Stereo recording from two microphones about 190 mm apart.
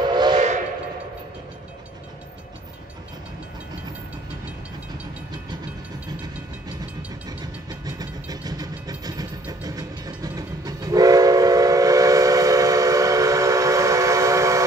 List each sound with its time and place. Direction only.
0.0 s steam whistle: 20° right (ahead or behind)
7.8 s vehicle: 20° right (ahead or behind)